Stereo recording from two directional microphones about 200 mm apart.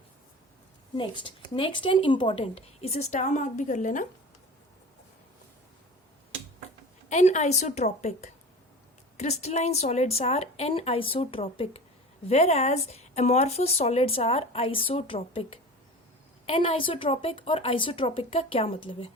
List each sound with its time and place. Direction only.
0.9 s speech: 25° left (ahead or behind)
7.1 s speech: 35° left (ahead or behind)
16.5 s speech: 25° left (ahead or behind)